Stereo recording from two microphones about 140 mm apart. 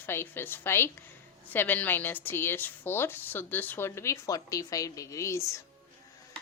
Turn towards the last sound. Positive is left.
turn(degrees=20)  # may be behind; listen again after turning